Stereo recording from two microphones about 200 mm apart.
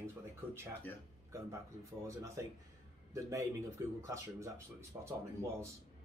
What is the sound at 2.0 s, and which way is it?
Speech, 15° right (ahead or behind).